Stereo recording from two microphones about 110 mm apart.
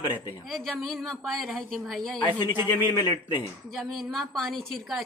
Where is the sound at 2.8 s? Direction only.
40° left (ahead or behind).